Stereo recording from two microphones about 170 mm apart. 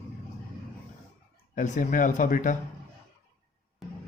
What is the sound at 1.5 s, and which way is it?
A man's voice, 50° left (ahead or behind).